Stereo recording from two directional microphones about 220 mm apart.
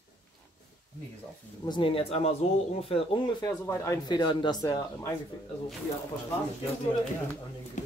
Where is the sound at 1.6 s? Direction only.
20° left (ahead or behind).